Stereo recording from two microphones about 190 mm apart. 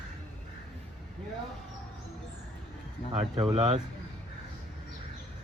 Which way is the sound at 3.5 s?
30° right (ahead or behind).